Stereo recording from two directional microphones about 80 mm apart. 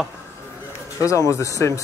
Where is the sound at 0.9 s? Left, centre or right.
Left.